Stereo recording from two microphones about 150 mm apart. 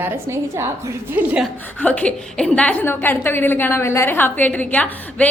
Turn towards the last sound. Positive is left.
turn(degrees=10)  # may be behind; listen again after turning